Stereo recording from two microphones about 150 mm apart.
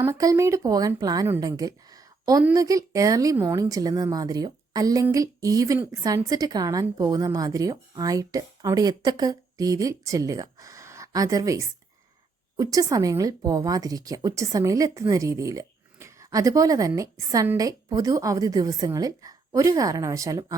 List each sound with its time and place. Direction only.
0.0 s speech: 20° right (ahead or behind)